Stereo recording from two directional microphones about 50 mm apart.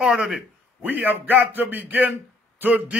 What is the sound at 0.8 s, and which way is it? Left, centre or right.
Speech, right.